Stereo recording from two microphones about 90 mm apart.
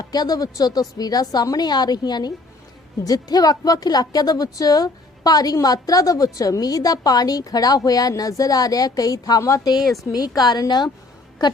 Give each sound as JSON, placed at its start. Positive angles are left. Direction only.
{"t": 0.0, "sound": "a woman's voice", "side_deg": 45}